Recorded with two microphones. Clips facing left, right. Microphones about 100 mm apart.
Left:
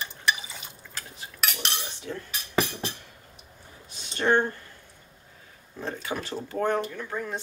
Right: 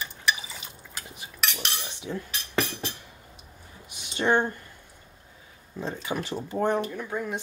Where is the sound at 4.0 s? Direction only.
15° right (ahead or behind).